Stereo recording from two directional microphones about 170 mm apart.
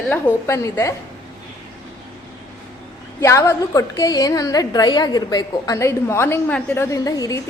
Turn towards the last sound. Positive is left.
turn(degrees=20)  # may be behind; listen again after turning